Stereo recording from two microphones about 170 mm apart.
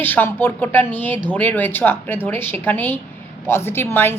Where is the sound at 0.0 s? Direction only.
10° left (ahead or behind).